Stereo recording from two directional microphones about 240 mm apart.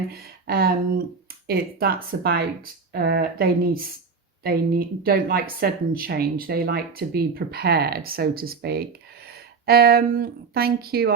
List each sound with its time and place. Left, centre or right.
0.1 s speech: right